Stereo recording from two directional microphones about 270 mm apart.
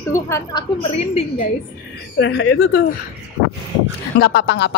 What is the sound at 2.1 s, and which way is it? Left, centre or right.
Speech, left.